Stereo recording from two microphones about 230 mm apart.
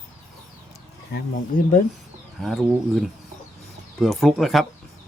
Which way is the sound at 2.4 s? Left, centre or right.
Centre.